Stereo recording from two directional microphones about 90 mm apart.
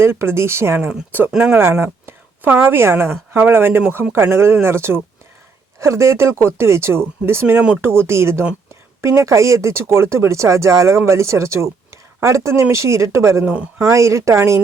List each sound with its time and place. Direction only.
0.0 s speech: 30° right (ahead or behind)
0.9 s speech: 15° right (ahead or behind)
1.5 s a woman's voice: 25° right (ahead or behind)
7.8 s speech: 25° right (ahead or behind)
13.4 s speech: 15° right (ahead or behind)
13.8 s speech: 35° right (ahead or behind)